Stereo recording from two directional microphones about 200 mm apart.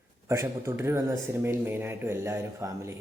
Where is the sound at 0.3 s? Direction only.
15° right (ahead or behind).